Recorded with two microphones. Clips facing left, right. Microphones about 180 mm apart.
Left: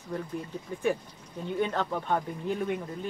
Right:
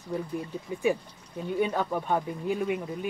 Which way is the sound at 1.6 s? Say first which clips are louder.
Right 2 dB; 10° right (ahead or behind).